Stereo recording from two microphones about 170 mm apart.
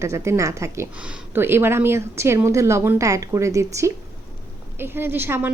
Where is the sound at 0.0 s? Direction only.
15° right (ahead or behind).